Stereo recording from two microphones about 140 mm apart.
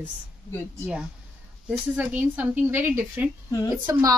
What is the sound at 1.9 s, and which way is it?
A woman's voice, 10° right (ahead or behind).